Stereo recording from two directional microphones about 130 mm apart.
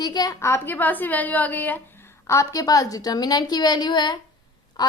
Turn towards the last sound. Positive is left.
turn(degrees=30)  # may be behind; listen again after turning